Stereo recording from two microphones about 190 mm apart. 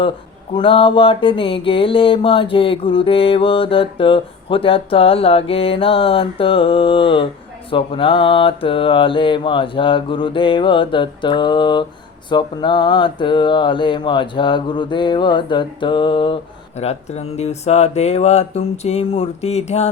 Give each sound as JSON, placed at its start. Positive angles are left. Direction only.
{"t": 0.5, "sound": "mantra", "side_deg": 30}
{"t": 16.8, "sound": "speech", "side_deg": 35}